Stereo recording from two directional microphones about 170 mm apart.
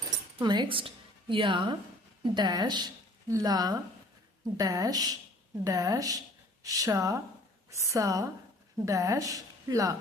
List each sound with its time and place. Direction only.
0.4 s a woman's voice: 25° right (ahead or behind)